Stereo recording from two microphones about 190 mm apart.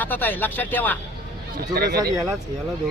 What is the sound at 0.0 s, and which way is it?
Speech, 10° left (ahead or behind).